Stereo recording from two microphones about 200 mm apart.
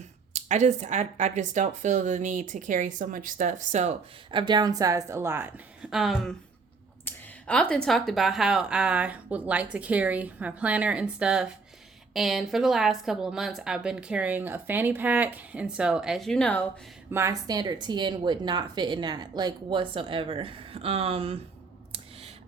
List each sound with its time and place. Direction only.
0.3 s speech: 35° right (ahead or behind)
4.3 s a woman's voice: 25° right (ahead or behind)
5.9 s a woman's voice: centre (ahead or behind)
17.1 s speech: 15° right (ahead or behind)